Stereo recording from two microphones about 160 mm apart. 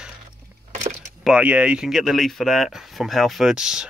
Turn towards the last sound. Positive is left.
turn(degrees=-5)  # may be behind; listen again after turning